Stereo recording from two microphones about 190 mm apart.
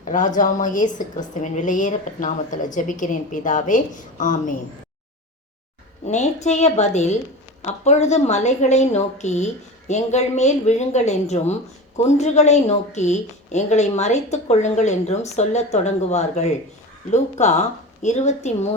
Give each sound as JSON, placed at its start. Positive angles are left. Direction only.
{"t": 0.0, "sound": "a woman's voice", "side_deg": 40}
{"t": 6.1, "sound": "a woman's voice", "side_deg": 35}